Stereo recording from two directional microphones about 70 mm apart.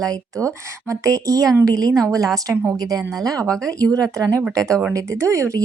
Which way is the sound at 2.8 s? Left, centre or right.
Right.